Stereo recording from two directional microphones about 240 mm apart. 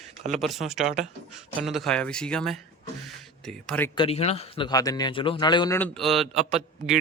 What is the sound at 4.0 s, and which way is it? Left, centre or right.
A man's voice, left.